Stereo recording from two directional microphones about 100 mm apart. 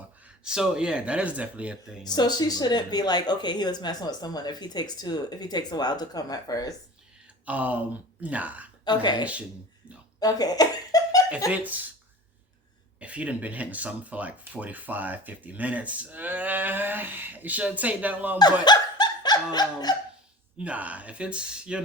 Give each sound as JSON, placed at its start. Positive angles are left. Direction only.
{"t": 0.4, "sound": "speech", "side_deg": -5}
{"t": 2.0, "sound": "speech", "side_deg": 45}
{"t": 7.4, "sound": "speech", "side_deg": -15}
{"t": 8.8, "sound": "speech", "side_deg": 45}
{"t": 11.5, "sound": "speech", "side_deg": -15}
{"t": 13.0, "sound": "speech", "side_deg": -15}
{"t": 18.6, "sound": "dog", "side_deg": 45}
{"t": 20.6, "sound": "speech", "side_deg": -15}